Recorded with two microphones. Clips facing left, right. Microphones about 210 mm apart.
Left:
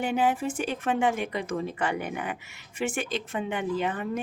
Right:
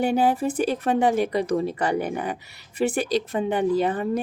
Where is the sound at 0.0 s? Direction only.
35° right (ahead or behind).